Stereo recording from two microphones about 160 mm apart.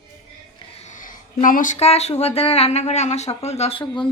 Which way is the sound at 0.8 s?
50° left (ahead or behind).